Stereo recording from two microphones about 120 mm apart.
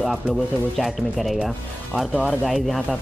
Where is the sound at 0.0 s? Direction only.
Centre (ahead or behind).